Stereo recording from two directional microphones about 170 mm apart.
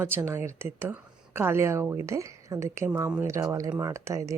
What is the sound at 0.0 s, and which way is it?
A woman's voice, 15° right (ahead or behind).